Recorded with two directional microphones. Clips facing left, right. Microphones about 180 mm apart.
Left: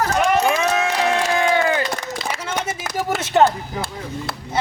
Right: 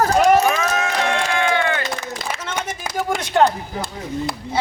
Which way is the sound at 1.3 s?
40° left (ahead or behind).